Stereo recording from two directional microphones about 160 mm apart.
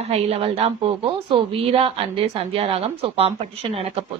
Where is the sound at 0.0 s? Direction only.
40° right (ahead or behind).